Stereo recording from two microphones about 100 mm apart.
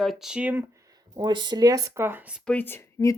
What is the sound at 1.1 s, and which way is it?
Speech, 45° right (ahead or behind).